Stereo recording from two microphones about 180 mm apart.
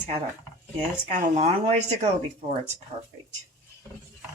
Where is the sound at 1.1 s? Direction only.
40° right (ahead or behind).